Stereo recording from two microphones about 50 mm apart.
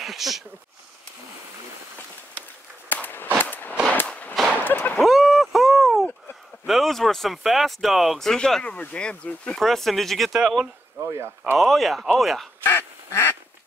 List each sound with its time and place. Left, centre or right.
0.0 s speech: centre
2.9 s a sound: left
5.0 s a sound: centre
6.6 s speech: centre
8.4 s speech: centre
8.6 s speech: left
9.6 s speech: centre
10.4 s speech: centre
11.0 s speech: right
11.5 s speech: centre
12.6 s quack: left